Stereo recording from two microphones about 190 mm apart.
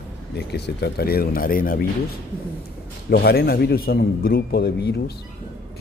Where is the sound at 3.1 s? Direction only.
55° left (ahead or behind).